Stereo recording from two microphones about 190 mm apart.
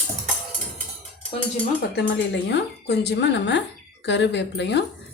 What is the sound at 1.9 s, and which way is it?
A woman's voice, 65° left (ahead or behind).